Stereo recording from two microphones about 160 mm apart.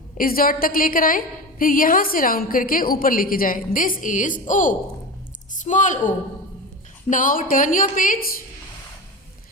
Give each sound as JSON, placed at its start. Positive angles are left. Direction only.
{"t": 0.2, "sound": "a woman's voice", "side_deg": 65}
{"t": 7.1, "sound": "a woman's voice", "side_deg": 55}